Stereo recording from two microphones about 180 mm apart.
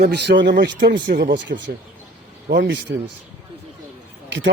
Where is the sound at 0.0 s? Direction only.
65° right (ahead or behind).